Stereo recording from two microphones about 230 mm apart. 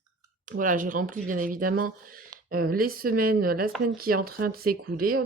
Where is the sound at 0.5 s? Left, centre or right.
Right.